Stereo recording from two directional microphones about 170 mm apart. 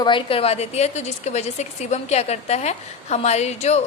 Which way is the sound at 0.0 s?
30° left (ahead or behind).